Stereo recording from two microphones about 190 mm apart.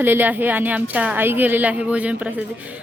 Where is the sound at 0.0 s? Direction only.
10° right (ahead or behind).